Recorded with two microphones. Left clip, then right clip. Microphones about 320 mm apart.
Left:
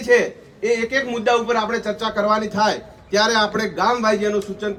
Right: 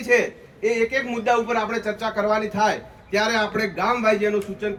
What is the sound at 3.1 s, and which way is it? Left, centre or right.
Speech, right.